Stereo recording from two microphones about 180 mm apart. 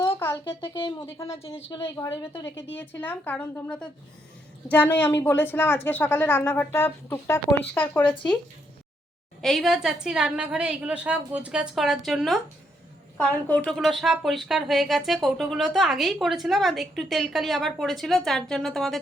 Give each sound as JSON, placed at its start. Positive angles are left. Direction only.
{"t": 0.6, "sound": "speech", "side_deg": 25}
{"t": 2.7, "sound": "a woman's voice", "side_deg": 10}
{"t": 9.4, "sound": "a woman's voice", "side_deg": 0}